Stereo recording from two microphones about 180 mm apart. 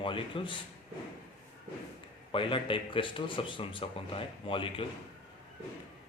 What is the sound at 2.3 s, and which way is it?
A man's voice, 30° left (ahead or behind).